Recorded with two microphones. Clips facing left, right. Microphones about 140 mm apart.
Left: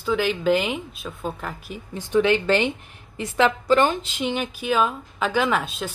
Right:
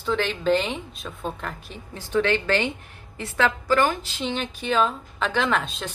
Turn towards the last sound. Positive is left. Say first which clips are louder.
# left 2 dB
turn(degrees=5)  # may be behind; listen again after turning